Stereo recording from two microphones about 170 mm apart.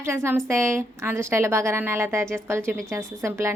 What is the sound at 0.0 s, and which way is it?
A woman's voice, 15° right (ahead or behind).